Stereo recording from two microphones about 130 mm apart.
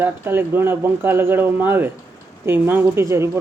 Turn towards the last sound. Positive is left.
turn(degrees=-20)  # may be behind; listen again after turning